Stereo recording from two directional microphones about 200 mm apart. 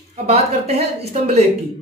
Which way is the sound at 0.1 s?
30° right (ahead or behind).